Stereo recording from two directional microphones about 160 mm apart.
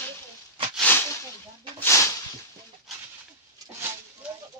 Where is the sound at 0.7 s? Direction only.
10° left (ahead or behind).